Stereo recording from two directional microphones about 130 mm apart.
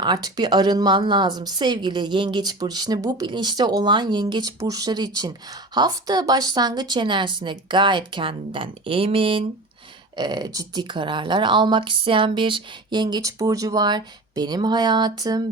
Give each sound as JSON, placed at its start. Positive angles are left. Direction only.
{"t": 0.0, "sound": "a woman's voice", "side_deg": -30}
{"t": 10.2, "sound": "a woman's voice", "side_deg": -30}